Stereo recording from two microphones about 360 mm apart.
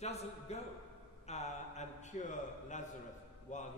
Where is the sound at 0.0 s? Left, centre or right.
Centre.